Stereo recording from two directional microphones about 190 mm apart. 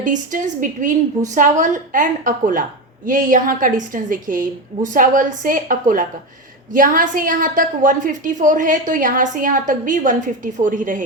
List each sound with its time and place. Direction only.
0.0 s a woman's voice: 40° right (ahead or behind)